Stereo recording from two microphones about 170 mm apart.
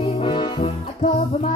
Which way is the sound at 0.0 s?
30° left (ahead or behind).